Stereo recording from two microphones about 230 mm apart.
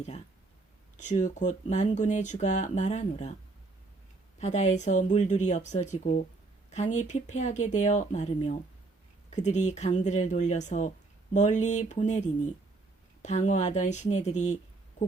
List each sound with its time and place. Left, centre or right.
0.9 s speech: left
4.4 s speech: left